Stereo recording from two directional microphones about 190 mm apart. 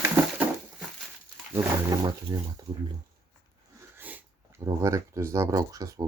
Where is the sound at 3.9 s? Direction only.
10° right (ahead or behind).